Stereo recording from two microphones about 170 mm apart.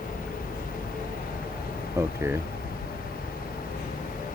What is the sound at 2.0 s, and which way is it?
Speech, 15° right (ahead or behind).